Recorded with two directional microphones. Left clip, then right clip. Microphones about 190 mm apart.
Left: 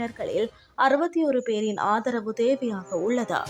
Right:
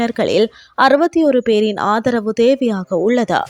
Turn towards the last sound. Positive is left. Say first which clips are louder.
# right 10 dB
turn(degrees=-35)  # may be behind; listen again after turning